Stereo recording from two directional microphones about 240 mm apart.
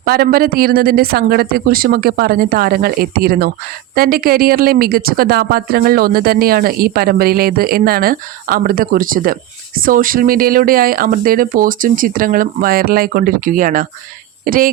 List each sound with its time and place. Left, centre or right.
0.0 s speech: right